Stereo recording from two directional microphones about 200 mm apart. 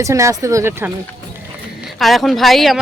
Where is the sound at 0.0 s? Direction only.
15° right (ahead or behind).